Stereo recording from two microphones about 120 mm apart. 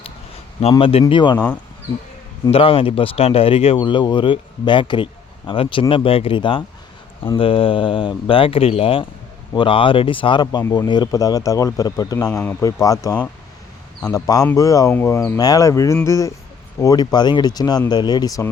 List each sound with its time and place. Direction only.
0.7 s speech: 50° left (ahead or behind)
2.5 s speech: 50° left (ahead or behind)
10.6 s speech: 25° left (ahead or behind)
10.8 s speech: 35° left (ahead or behind)
12.3 s speech: 15° left (ahead or behind)
12.6 s speech: 30° left (ahead or behind)